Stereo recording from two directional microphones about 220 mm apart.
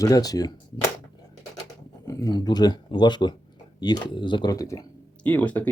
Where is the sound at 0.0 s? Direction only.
15° left (ahead or behind).